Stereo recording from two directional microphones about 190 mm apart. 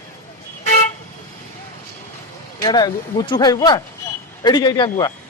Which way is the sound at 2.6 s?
20° left (ahead or behind).